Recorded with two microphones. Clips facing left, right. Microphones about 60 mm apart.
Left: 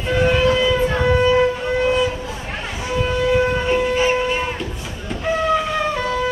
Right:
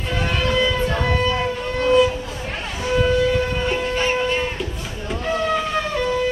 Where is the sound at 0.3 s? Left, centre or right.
Centre.